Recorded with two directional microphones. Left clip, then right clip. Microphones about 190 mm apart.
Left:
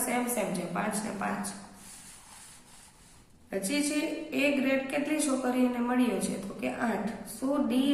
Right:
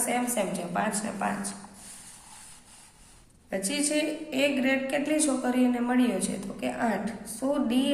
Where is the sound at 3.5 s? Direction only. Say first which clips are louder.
Right 2 dB; 40° right (ahead or behind).